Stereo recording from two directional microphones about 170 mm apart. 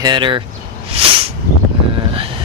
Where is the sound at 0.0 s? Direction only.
25° right (ahead or behind).